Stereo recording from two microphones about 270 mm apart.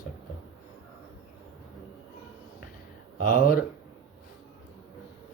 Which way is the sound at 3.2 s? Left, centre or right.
Left.